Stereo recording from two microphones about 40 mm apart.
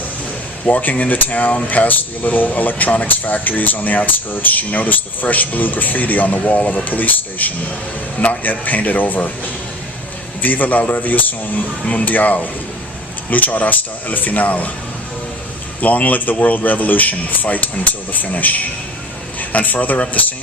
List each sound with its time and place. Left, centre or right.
0.6 s speech: left
10.4 s speech: left
15.8 s a man's voice: left